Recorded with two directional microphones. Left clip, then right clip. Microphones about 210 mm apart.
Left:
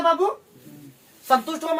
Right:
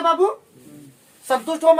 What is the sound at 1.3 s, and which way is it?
Speech, 25° right (ahead or behind).